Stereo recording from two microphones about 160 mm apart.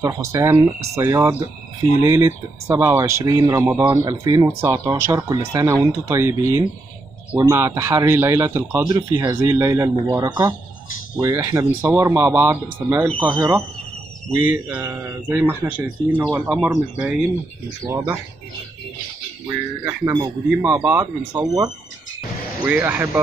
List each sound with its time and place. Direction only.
0.0 s speech: 20° right (ahead or behind)
17.8 s speech: 15° right (ahead or behind)
20.6 s speech: 10° right (ahead or behind)
21.3 s speech: 25° right (ahead or behind)
22.7 s speech: 10° right (ahead or behind)